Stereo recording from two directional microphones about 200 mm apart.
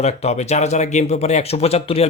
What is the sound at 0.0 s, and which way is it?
Speech, 35° left (ahead or behind).